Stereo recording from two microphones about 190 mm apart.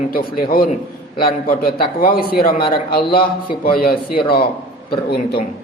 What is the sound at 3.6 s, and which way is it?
Speech, 50° left (ahead or behind).